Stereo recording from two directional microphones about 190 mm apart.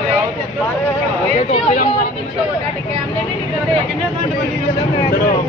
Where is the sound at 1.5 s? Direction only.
45° left (ahead or behind).